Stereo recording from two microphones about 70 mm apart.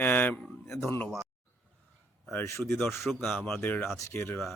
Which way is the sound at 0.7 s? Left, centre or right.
Left.